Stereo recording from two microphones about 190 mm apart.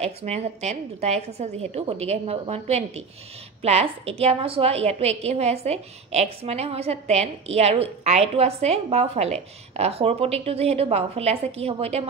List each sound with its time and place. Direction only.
0.0 s a woman's voice: 35° right (ahead or behind)